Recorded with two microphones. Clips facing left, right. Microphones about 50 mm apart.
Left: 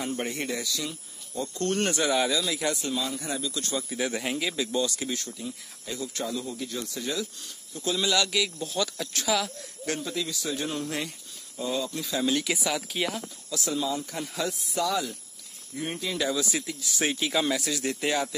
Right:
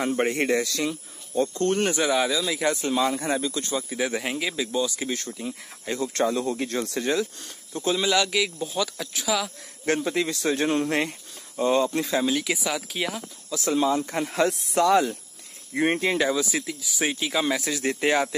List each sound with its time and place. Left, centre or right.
0.0 s speech: right
1.7 s speech: centre
2.4 s speech: centre
2.7 s speech: right
3.6 s speech: centre
5.1 s speech: right
6.6 s speech: right
7.8 s speech: right; by 9.5 s centre
9.8 s speech: right
12.3 s speech: centre
13.6 s speech: right
15.7 s speech: right
16.2 s speech: centre
17.6 s speech: right